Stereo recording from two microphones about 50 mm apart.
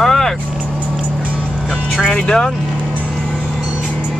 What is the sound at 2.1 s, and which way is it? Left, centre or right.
Speech, centre.